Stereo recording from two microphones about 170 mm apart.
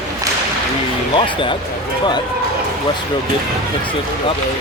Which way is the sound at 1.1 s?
30° left (ahead or behind).